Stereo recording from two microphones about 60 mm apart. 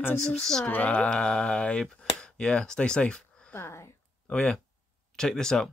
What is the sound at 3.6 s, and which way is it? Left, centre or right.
Speech, left.